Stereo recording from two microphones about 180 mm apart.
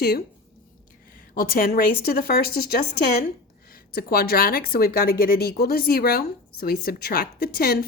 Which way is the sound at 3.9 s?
55° left (ahead or behind).